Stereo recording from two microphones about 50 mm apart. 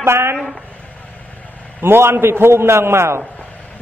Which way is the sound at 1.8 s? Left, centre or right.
Right.